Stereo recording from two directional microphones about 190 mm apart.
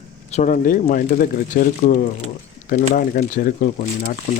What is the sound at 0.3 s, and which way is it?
Speech, 40° left (ahead or behind).